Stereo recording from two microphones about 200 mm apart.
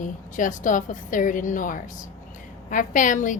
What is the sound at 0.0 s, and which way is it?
A woman's voice, 40° left (ahead or behind).